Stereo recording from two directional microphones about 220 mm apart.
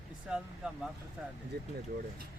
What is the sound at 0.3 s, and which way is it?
Speech, 5° right (ahead or behind).